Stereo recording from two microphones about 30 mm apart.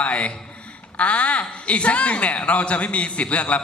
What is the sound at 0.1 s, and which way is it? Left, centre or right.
A man's voice, left.